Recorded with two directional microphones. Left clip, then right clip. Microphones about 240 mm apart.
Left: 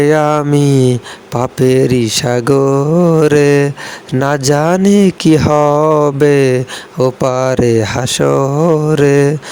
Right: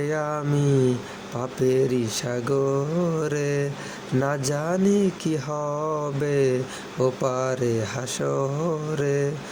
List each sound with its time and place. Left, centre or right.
0.0 s speech: left